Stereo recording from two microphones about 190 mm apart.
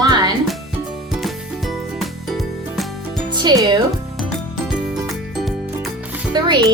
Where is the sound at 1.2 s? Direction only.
Centre (ahead or behind).